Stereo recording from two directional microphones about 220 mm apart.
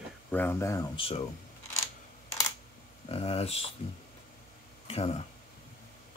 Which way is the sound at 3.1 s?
25° left (ahead or behind).